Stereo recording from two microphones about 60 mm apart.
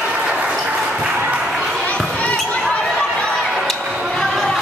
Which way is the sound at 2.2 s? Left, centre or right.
Left.